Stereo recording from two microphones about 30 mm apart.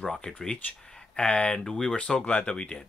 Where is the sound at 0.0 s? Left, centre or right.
Left.